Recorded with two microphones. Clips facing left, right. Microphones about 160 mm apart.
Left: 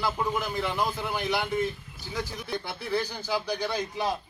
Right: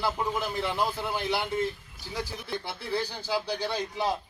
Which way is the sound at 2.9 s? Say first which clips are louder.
Left 1 dB; 30° right (ahead or behind).